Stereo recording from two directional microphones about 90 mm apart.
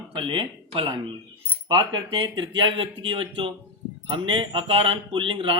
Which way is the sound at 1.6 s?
60° right (ahead or behind).